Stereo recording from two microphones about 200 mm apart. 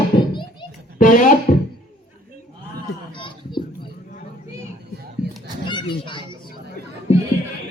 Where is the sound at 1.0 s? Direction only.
40° left (ahead or behind).